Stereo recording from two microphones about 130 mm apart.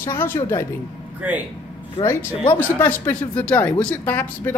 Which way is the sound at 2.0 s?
35° left (ahead or behind).